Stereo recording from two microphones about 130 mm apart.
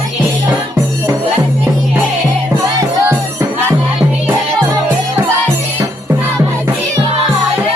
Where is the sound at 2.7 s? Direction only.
20° right (ahead or behind).